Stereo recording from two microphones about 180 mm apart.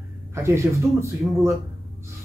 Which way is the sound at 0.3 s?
15° right (ahead or behind).